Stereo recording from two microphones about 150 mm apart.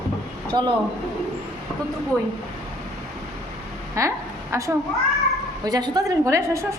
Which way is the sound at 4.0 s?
20° right (ahead or behind).